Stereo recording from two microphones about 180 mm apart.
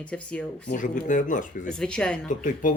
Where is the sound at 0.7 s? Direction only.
45° left (ahead or behind).